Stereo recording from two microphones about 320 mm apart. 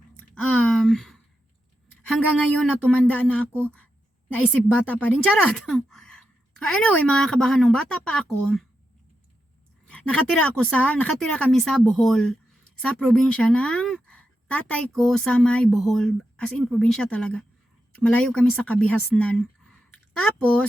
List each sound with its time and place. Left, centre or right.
0.7 s a sound: centre
2.1 s a woman's voice: centre
9.8 s a woman's voice: centre